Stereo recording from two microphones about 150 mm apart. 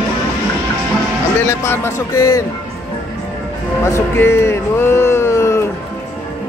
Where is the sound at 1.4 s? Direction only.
20° left (ahead or behind).